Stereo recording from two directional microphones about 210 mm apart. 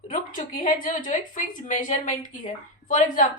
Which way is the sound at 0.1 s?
40° left (ahead or behind).